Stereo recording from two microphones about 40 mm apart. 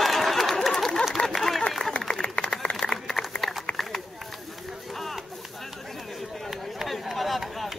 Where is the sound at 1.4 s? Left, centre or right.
Centre.